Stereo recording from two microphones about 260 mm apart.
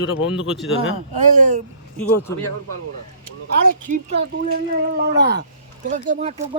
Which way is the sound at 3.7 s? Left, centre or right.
Right.